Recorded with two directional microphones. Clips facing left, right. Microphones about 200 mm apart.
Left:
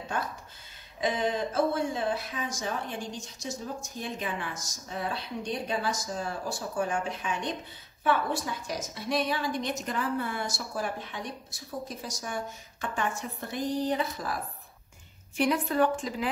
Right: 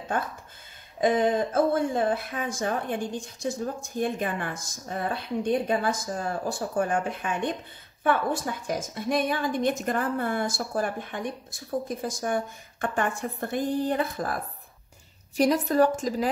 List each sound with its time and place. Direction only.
1.0 s speech: 50° right (ahead or behind)
15.3 s a woman's voice: 40° right (ahead or behind)